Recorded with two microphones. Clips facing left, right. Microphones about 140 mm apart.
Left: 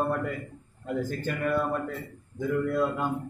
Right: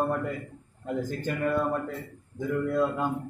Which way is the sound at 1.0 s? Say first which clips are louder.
Even; 15° right (ahead or behind).